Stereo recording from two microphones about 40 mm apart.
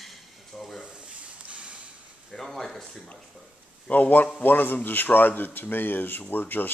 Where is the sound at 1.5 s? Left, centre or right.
Right.